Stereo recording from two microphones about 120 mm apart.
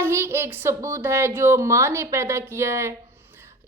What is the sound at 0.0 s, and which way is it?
A woman's voice, 20° right (ahead or behind).